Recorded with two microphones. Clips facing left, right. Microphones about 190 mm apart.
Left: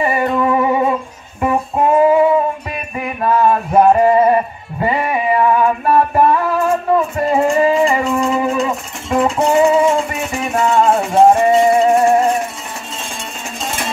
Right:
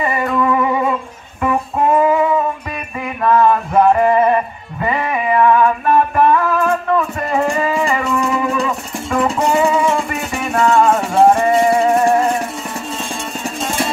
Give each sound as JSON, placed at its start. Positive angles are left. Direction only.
{"t": 0.0, "sound": "music", "side_deg": 25}